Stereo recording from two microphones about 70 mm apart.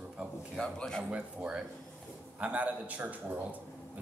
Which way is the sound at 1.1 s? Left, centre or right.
Centre.